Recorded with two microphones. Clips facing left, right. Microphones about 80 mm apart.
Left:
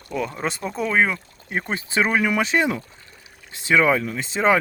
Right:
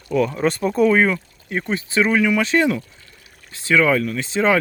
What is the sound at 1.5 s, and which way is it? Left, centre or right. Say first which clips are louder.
Speech: right 3 dB; left.